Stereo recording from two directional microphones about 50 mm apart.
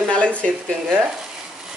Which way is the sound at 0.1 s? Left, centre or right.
Left.